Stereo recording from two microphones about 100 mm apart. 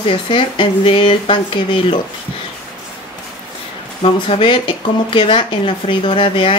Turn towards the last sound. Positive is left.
turn(degrees=60)  # may be behind; listen again after turning